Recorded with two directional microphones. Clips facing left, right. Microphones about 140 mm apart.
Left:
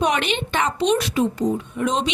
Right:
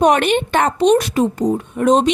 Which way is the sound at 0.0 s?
50° right (ahead or behind).